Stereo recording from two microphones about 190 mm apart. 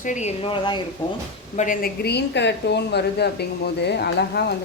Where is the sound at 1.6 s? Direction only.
50° left (ahead or behind).